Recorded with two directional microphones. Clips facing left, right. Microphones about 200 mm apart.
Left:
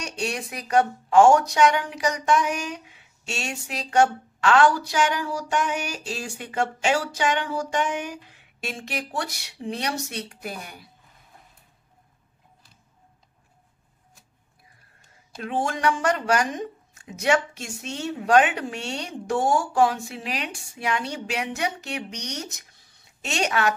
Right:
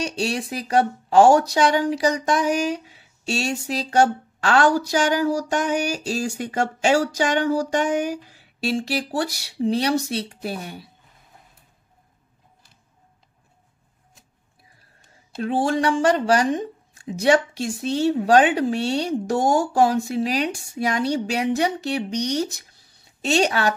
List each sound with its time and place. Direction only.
0.0 s speech: 30° right (ahead or behind)
15.3 s speech: 30° right (ahead or behind)